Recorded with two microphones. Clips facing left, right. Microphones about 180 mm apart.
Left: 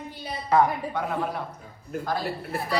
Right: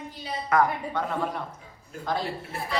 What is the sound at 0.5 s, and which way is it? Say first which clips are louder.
Speech: left 2 dB; 30° left (ahead or behind).